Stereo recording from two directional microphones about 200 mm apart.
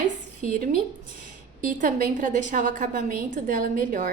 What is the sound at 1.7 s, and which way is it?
A woman's voice, 40° right (ahead or behind).